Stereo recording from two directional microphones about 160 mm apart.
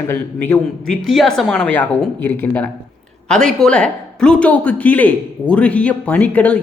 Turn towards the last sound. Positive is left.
turn(degrees=10)  # may be behind; listen again after turning